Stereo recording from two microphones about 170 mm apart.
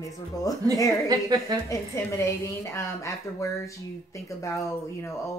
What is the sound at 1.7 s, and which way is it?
A woman's voice, 15° left (ahead or behind).